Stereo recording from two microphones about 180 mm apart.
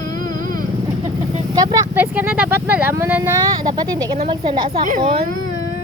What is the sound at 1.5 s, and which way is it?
Speech, 20° right (ahead or behind).